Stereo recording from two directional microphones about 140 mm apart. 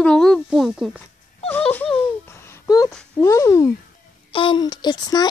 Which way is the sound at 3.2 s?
20° left (ahead or behind).